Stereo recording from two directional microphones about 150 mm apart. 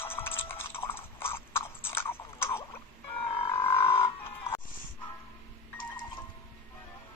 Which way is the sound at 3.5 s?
15° left (ahead or behind).